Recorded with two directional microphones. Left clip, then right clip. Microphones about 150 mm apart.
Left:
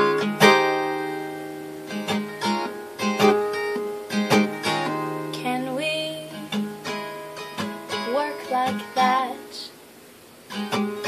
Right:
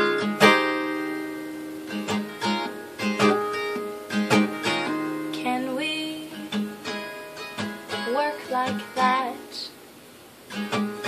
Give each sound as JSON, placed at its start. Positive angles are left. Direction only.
{"t": 0.1, "sound": "music", "side_deg": 15}
{"t": 5.3, "sound": "music", "side_deg": 10}
{"t": 7.9, "sound": "music", "side_deg": 15}